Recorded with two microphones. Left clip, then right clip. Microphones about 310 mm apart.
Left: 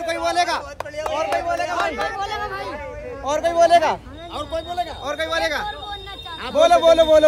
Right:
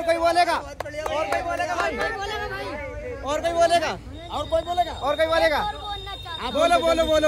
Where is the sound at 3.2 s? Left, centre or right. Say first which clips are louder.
Left 4 dB; centre.